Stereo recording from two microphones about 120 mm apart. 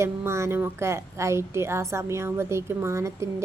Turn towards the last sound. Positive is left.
turn(degrees=-25)  # may be behind; listen again after turning